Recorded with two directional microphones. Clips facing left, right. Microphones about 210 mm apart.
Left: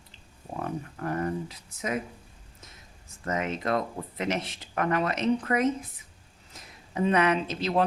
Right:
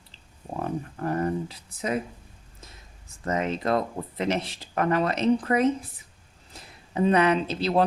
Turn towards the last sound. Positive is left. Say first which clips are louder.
# right 3 dB
turn(degrees=-35)  # may be behind; listen again after turning